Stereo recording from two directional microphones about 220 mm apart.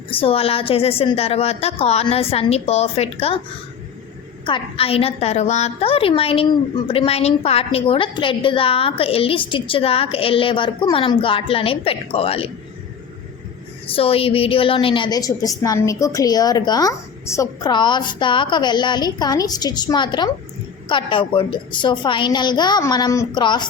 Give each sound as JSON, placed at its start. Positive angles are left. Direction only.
{"t": 0.1, "sound": "a woman's voice", "side_deg": 25}
{"t": 4.4, "sound": "a woman's voice", "side_deg": 25}
{"t": 13.8, "sound": "a woman's voice", "side_deg": 25}